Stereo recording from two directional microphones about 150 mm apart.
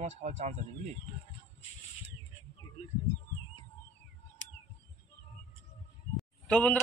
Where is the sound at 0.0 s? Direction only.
50° right (ahead or behind).